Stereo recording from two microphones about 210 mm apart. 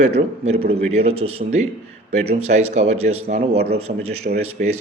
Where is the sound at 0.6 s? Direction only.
30° right (ahead or behind).